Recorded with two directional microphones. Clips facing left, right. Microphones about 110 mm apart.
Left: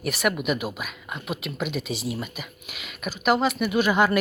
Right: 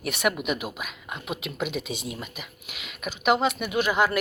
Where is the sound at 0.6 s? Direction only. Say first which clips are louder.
Left 3 dB; 10° right (ahead or behind).